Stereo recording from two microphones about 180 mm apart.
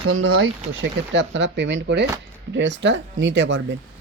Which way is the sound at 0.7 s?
90° right.